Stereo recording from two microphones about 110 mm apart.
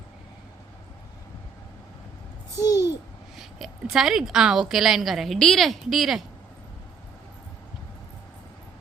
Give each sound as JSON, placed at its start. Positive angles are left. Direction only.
{"t": 2.6, "sound": "babbling", "side_deg": 35}
{"t": 3.3, "sound": "a sound", "side_deg": -5}
{"t": 4.7, "sound": "a woman's voice", "side_deg": -5}